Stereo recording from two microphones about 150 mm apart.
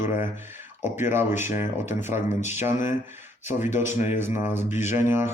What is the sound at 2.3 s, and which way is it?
Speech, 50° left (ahead or behind).